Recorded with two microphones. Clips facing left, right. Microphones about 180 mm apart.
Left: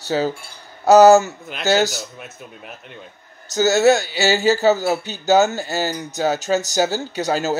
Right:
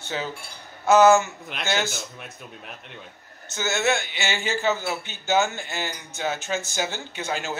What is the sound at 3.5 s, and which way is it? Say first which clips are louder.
Speech: left 10 dB; 40° left (ahead or behind).